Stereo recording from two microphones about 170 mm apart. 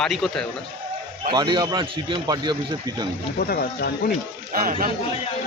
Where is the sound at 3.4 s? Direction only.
65° left (ahead or behind).